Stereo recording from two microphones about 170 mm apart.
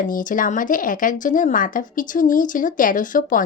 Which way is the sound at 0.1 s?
50° left (ahead or behind).